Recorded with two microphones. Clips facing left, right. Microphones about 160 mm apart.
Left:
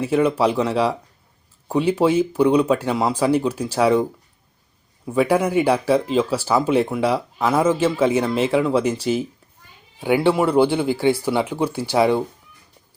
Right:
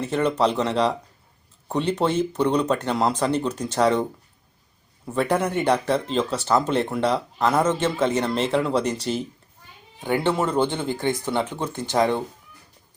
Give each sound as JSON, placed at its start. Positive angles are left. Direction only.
{"t": 0.0, "sound": "speech", "side_deg": 5}
{"t": 5.0, "sound": "speech", "side_deg": 5}